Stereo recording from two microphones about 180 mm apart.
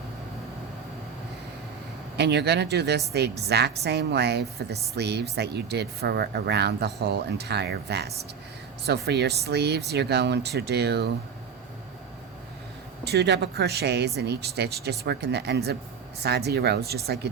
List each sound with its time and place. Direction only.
2.1 s speech: 70° right (ahead or behind)
13.1 s speech: 65° right (ahead or behind)